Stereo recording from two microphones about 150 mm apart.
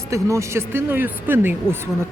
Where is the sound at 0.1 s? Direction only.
20° right (ahead or behind).